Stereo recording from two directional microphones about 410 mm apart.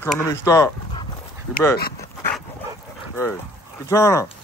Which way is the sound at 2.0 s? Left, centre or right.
Centre.